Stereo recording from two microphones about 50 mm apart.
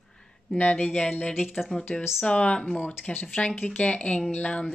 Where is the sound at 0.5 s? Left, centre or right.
Left.